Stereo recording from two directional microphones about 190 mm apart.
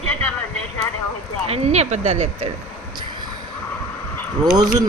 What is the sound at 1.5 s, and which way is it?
Speech, 35° right (ahead or behind).